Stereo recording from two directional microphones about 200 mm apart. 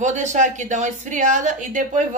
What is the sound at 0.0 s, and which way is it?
A woman's voice, 35° right (ahead or behind).